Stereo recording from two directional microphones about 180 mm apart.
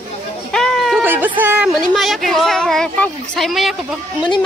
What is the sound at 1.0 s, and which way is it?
Speech, 10° right (ahead or behind).